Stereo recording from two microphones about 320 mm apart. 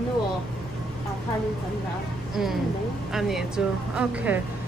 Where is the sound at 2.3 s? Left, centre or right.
Centre.